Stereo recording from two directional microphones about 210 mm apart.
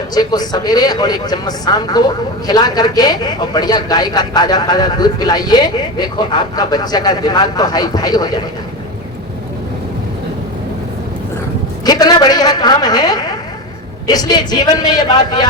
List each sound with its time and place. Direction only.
0.1 s a man's voice: 20° left (ahead or behind)
11.9 s a man's voice: 20° left (ahead or behind)